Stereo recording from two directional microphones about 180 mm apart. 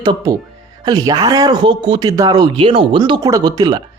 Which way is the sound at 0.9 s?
20° right (ahead or behind).